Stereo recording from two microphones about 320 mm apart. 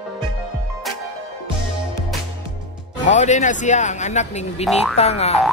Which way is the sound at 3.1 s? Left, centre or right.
Left.